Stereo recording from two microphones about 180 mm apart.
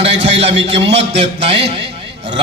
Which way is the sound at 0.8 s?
75° right (ahead or behind).